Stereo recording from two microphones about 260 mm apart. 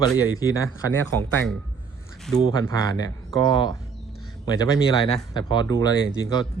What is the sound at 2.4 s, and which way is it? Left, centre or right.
Speech, centre.